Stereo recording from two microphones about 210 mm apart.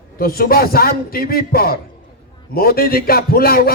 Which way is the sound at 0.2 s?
45° left (ahead or behind).